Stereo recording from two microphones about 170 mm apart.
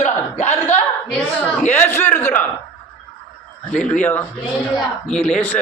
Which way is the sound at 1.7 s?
10° left (ahead or behind).